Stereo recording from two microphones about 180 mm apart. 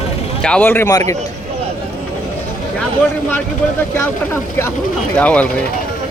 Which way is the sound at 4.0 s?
15° left (ahead or behind).